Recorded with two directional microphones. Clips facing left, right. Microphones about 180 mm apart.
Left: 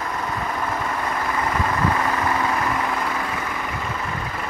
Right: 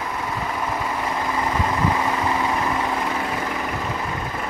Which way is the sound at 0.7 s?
10° right (ahead or behind).